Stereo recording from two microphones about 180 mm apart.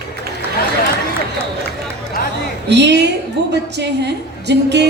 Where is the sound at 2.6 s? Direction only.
70° right (ahead or behind).